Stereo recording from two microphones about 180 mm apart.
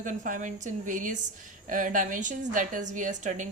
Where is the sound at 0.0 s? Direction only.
45° right (ahead or behind).